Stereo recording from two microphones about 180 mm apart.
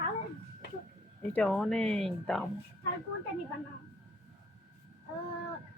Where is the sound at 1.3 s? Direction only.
5° left (ahead or behind).